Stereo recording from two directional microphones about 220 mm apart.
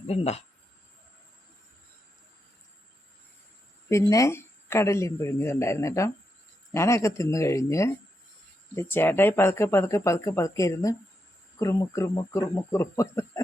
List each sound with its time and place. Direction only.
0.1 s speech: 30° left (ahead or behind)
3.8 s speech: 15° left (ahead or behind)